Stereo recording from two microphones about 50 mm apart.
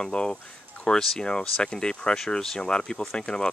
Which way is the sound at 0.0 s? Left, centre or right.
Centre.